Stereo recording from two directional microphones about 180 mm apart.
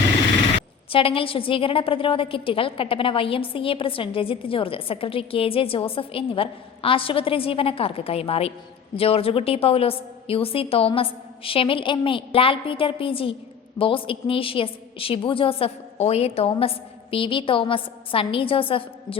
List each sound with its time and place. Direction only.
0.9 s a woman's voice: 30° left (ahead or behind)